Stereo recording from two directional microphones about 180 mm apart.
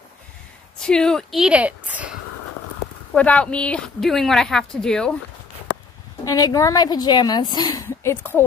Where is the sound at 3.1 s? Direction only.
5° left (ahead or behind).